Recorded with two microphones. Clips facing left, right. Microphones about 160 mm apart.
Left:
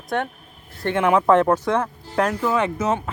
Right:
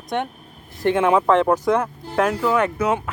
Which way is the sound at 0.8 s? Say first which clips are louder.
Right 1 dB; 15° right (ahead or behind).